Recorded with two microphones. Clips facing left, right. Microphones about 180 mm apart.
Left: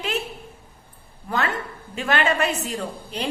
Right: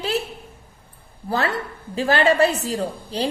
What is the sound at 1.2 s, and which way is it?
A woman's voice, 35° right (ahead or behind).